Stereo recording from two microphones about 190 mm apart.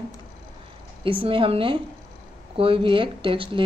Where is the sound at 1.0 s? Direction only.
25° right (ahead or behind).